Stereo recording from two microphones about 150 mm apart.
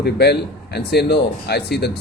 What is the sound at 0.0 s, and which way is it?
Speech, 90° left.